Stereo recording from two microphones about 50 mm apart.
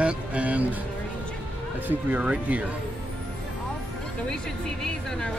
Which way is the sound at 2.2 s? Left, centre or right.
Right.